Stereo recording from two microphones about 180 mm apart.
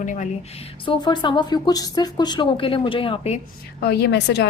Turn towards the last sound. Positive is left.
turn(degrees=70)  # may be behind; listen again after turning